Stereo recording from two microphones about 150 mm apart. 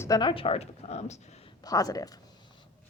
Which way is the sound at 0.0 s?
25° left (ahead or behind).